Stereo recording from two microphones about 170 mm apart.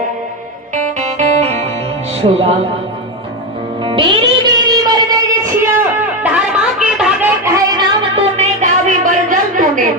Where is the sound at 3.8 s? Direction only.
30° right (ahead or behind).